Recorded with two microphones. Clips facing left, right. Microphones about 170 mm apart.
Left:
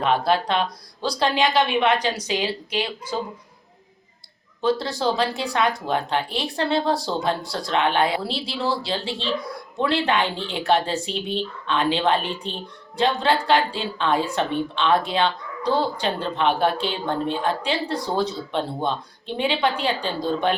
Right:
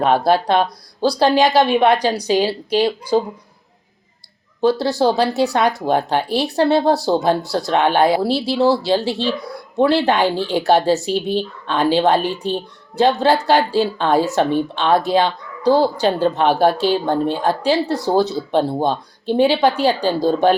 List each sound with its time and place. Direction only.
0.0 s speech: 40° right (ahead or behind)
4.6 s speech: 35° right (ahead or behind)